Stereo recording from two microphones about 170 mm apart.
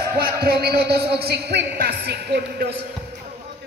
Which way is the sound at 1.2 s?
75° right (ahead or behind).